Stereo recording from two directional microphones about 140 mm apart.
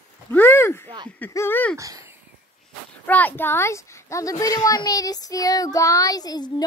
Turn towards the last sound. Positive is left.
turn(degrees=30)  # may be behind; listen again after turning